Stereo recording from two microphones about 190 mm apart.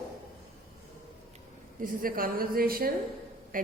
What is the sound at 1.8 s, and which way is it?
A woman's voice, 45° right (ahead or behind).